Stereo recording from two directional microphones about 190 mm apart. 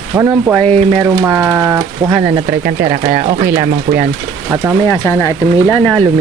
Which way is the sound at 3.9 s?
30° right (ahead or behind).